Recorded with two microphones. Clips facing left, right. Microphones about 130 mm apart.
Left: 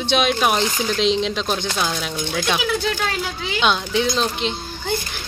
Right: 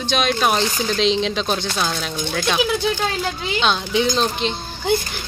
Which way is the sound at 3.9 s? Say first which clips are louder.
Right 1 dB; centre (ahead or behind).